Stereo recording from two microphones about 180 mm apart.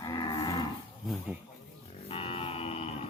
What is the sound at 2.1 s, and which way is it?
Cattle, 30° left (ahead or behind).